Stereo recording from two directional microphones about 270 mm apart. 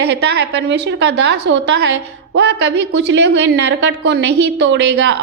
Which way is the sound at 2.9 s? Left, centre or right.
Right.